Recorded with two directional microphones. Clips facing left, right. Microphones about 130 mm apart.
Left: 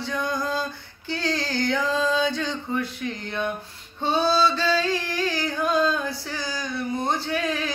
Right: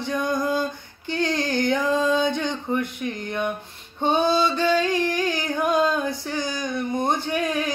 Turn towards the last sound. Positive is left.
turn(degrees=-15)  # may be behind; listen again after turning